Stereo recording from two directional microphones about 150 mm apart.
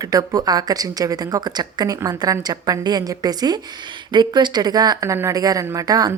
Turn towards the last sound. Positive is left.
turn(degrees=-25)  # may be behind; listen again after turning